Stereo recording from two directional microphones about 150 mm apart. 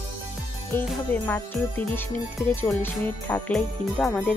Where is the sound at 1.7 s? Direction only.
15° left (ahead or behind).